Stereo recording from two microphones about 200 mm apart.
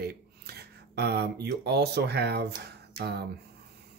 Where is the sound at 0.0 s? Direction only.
55° right (ahead or behind).